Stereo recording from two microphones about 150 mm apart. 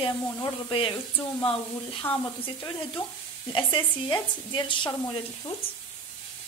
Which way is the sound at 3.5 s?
35° left (ahead or behind).